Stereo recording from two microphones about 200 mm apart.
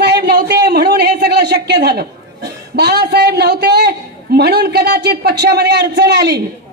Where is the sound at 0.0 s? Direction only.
55° right (ahead or behind).